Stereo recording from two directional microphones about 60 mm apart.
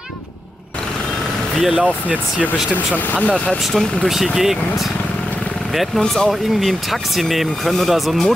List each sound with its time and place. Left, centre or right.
1.6 s speech: centre
2.4 s speech: left
3.7 s speech: centre
4.1 s speech: centre